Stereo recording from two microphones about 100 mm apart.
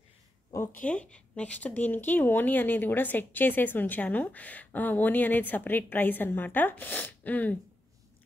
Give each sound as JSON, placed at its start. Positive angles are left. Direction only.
{"t": 0.5, "sound": "a woman's voice", "side_deg": 25}